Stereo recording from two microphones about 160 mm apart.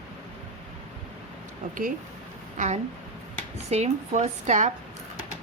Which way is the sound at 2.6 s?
45° right (ahead or behind).